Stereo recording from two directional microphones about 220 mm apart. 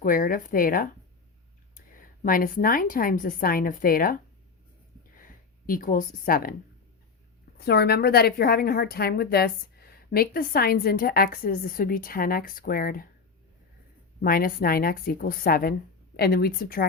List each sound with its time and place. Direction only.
0.0 s a woman's voice: 40° left (ahead or behind)
5.1 s a sound: 40° left (ahead or behind)
7.6 s a woman's voice: 45° left (ahead or behind)
14.2 s a woman's voice: 40° left (ahead or behind)